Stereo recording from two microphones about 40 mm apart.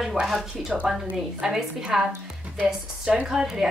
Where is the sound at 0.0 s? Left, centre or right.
Centre.